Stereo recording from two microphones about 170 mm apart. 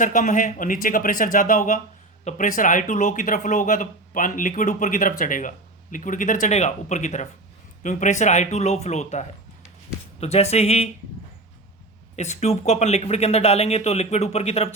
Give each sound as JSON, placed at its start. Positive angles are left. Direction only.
{"t": 0.0, "sound": "speech", "side_deg": 50}
{"t": 12.1, "sound": "speech", "side_deg": 40}